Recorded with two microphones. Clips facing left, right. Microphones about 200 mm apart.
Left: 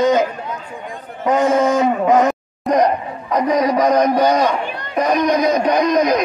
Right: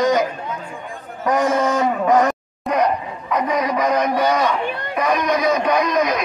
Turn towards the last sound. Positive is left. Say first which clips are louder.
# left 3 dB
turn(degrees=35)  # may be behind; listen again after turning